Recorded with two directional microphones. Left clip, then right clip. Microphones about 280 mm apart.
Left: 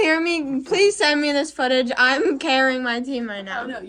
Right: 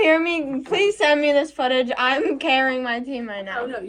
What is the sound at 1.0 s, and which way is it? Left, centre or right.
A woman's voice, centre.